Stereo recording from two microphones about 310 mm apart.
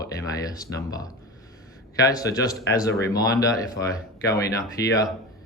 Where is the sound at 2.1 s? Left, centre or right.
Centre.